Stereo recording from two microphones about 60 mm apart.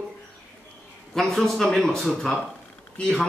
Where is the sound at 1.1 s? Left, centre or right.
Centre.